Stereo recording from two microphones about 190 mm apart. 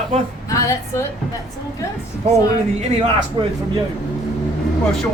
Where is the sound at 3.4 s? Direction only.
25° right (ahead or behind).